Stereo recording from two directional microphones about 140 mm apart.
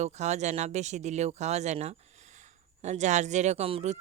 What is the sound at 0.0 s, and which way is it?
Speech, 55° right (ahead or behind).